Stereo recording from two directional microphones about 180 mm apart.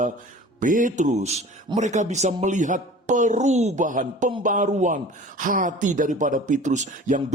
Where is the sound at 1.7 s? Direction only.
40° right (ahead or behind).